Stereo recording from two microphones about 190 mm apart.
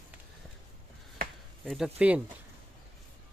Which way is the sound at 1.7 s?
5° right (ahead or behind).